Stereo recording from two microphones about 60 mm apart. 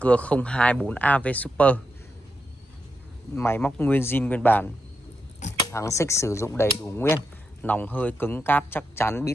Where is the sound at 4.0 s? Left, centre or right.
Left.